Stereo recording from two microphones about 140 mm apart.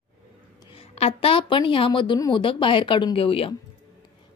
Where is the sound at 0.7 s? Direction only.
45° left (ahead or behind).